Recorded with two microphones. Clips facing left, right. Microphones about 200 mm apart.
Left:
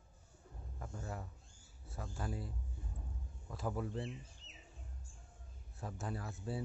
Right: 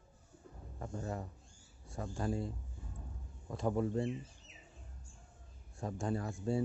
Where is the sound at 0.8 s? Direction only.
25° right (ahead or behind).